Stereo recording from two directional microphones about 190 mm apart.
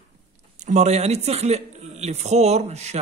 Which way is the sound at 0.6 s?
40° right (ahead or behind).